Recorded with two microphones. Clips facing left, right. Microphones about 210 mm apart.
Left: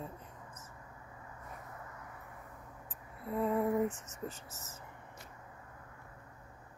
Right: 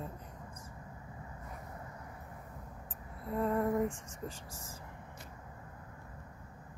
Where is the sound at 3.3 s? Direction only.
5° left (ahead or behind).